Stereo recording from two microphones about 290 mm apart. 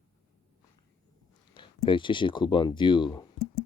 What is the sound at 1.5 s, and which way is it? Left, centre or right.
Speech, centre.